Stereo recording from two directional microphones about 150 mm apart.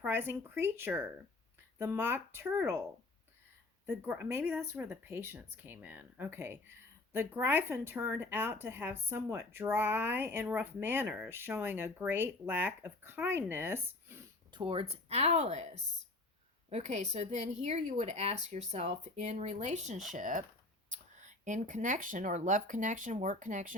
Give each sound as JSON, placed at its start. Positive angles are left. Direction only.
{"t": 0.0, "sound": "speech", "side_deg": -15}
{"t": 3.8, "sound": "speech", "side_deg": -10}
{"t": 14.5, "sound": "a woman's voice", "side_deg": -35}